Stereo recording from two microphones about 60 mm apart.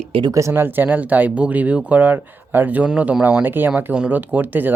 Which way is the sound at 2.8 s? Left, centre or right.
Centre.